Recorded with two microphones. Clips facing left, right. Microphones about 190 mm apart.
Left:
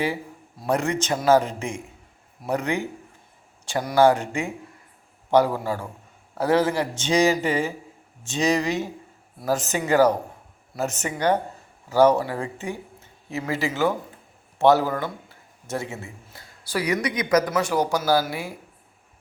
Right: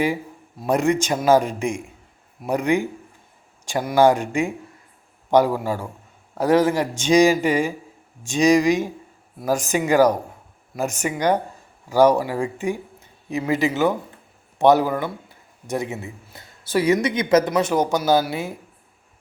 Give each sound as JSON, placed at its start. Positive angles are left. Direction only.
{"t": 0.6, "sound": "a man's voice", "side_deg": -15}
{"t": 3.9, "sound": "a man's voice", "side_deg": -15}